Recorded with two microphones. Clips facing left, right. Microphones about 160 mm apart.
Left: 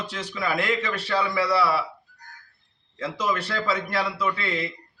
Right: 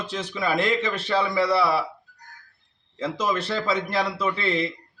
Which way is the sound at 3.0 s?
25° right (ahead or behind).